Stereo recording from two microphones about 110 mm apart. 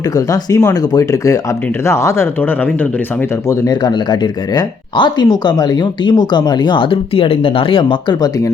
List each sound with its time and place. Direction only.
0.3 s speech: 30° left (ahead or behind)
3.7 s speech: 40° left (ahead or behind)